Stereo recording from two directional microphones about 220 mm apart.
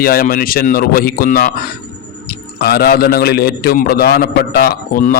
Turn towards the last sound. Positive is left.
turn(degrees=40)  # may be behind; listen again after turning